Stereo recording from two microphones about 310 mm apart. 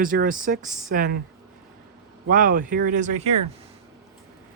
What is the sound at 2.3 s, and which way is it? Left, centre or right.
Speech, right.